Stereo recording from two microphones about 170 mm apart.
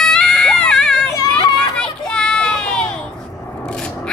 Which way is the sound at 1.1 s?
25° left (ahead or behind).